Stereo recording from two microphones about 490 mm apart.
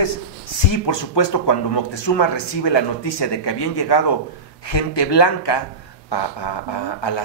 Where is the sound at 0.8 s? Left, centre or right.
Left.